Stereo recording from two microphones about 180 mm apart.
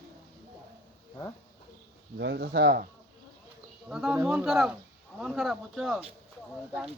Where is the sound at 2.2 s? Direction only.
70° right (ahead or behind).